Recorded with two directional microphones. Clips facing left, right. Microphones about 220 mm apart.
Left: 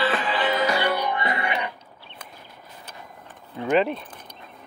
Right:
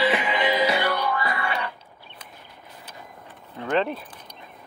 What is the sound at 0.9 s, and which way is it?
Music, 15° left (ahead or behind).